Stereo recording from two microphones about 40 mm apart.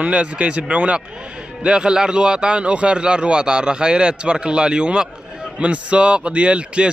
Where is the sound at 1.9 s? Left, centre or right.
Centre.